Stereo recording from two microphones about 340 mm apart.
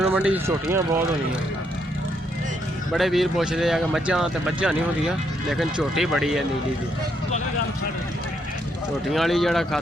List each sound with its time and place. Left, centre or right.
0.0 s speech: centre
2.9 s speech: centre
9.1 s speech: centre